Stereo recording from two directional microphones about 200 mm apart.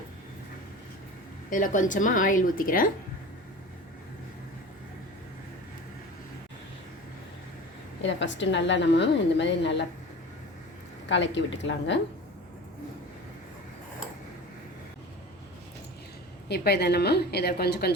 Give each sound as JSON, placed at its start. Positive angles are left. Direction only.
{"t": 1.5, "sound": "a woman's voice", "side_deg": 40}
{"t": 8.0, "sound": "a woman's voice", "side_deg": 65}
{"t": 11.1, "sound": "a woman's voice", "side_deg": 65}
{"t": 16.5, "sound": "a woman's voice", "side_deg": 55}